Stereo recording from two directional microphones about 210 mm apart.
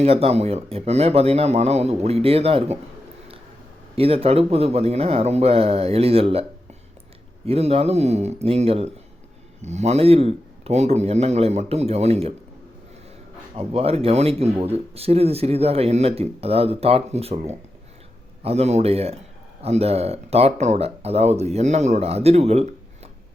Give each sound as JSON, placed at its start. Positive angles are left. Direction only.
{"t": 0.0, "sound": "speech", "side_deg": -30}
{"t": 3.9, "sound": "speech", "side_deg": -25}
{"t": 7.4, "sound": "speech", "side_deg": -30}
{"t": 13.6, "sound": "speech", "side_deg": -30}